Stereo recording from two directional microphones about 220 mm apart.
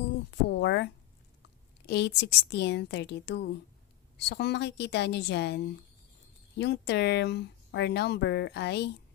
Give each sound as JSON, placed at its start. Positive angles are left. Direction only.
{"t": 0.5, "sound": "a sound", "side_deg": 50}
{"t": 1.9, "sound": "speech", "side_deg": 50}
{"t": 6.6, "sound": "speech", "side_deg": 50}